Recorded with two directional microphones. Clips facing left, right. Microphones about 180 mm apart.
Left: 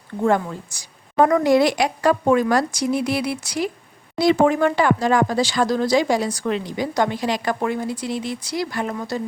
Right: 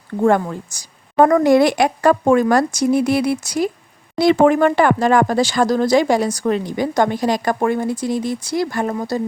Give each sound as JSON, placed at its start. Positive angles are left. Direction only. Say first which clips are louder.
{"t": 0.2, "sound": "speech", "louder": "right 4 dB", "side_deg": -50}
{"t": 4.2, "sound": "speech", "louder": "right 4 dB", "side_deg": -55}